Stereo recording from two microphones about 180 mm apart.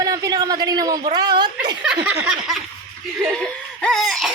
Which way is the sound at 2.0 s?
5° right (ahead or behind).